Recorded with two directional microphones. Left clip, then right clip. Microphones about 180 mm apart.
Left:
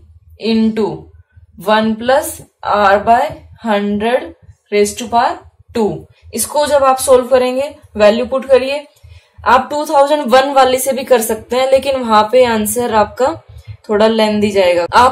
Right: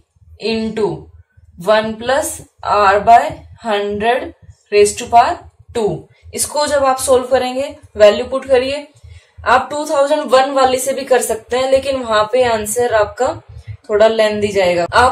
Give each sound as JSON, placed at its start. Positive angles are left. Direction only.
{"t": 0.4, "sound": "a woman's voice", "side_deg": 35}
{"t": 14.1, "sound": "a woman's voice", "side_deg": 40}